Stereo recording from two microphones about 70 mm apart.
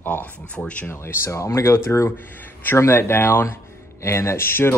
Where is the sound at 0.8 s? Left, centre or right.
Left.